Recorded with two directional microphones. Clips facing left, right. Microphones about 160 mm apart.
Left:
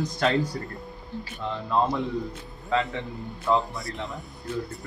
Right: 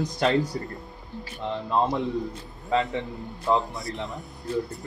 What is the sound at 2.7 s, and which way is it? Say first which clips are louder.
Speech: right 1 dB; 20° right (ahead or behind).